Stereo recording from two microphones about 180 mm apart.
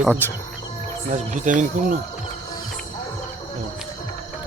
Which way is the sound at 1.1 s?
45° right (ahead or behind).